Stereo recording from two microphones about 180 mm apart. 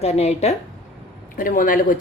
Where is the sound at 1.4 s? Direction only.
50° left (ahead or behind).